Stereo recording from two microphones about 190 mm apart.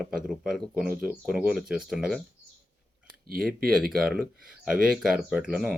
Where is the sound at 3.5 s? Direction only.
50° right (ahead or behind).